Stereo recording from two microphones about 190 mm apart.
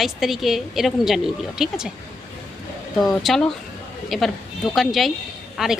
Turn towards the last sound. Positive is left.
turn(degrees=-5)  # may be behind; listen again after turning